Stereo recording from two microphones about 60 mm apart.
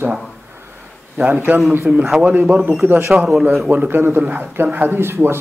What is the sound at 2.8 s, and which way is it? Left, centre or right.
Speech, right.